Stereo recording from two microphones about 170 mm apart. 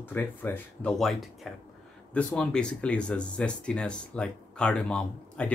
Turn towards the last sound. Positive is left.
turn(degrees=5)  # may be behind; listen again after turning